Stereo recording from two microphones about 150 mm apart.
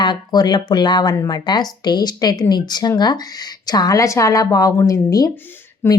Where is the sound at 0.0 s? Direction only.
30° left (ahead or behind).